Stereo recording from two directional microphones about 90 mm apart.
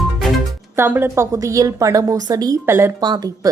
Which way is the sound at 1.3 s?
40° right (ahead or behind).